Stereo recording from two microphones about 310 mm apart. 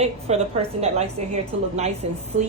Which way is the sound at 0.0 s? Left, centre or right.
Centre.